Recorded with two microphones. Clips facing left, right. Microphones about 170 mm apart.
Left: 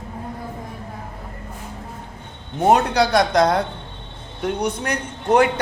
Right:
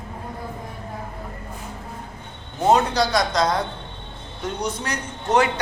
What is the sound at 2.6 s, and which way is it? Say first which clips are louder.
A man's voice: left 2 dB; 60° left (ahead or behind).